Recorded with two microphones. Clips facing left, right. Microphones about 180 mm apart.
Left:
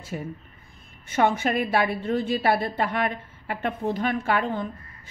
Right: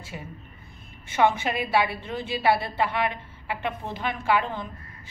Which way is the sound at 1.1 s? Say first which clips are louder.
Left 1 dB; 50° left (ahead or behind).